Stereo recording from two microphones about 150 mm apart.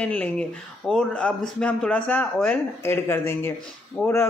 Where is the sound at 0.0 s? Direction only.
10° left (ahead or behind).